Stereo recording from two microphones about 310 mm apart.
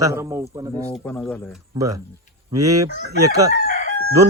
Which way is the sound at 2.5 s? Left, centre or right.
Centre.